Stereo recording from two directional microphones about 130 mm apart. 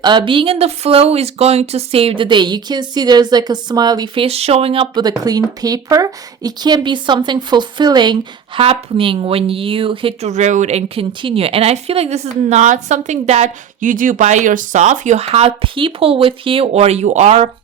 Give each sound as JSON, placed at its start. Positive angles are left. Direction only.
{"t": 0.0, "sound": "speech", "side_deg": -35}
{"t": 10.2, "sound": "speech", "side_deg": -65}